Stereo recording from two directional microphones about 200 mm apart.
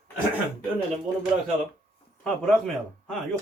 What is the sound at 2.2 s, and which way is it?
Speech, centre (ahead or behind).